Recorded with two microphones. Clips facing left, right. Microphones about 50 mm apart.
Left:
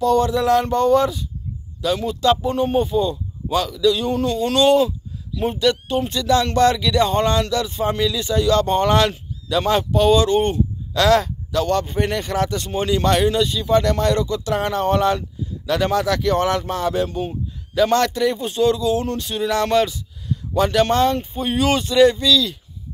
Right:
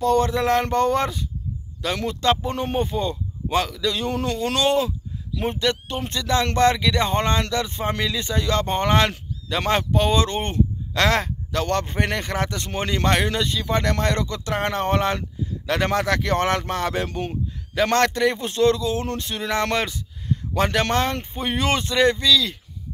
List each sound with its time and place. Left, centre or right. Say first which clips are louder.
0.0 s speech: left 2 dB; right
2.2 s speech: left 4 dB; right